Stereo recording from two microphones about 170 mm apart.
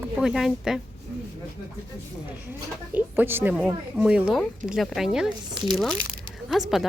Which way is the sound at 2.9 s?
10° right (ahead or behind).